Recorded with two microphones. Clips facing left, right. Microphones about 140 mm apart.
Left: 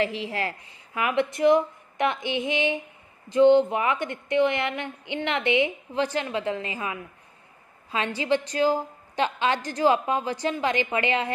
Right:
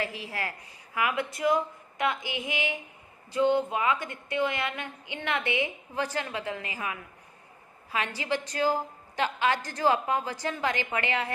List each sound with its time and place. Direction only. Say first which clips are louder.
0.0 s a woman's voice: left 7 dB; 25° left (ahead or behind)